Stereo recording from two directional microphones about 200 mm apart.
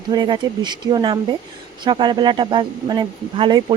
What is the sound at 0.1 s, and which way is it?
Speech, 20° right (ahead or behind).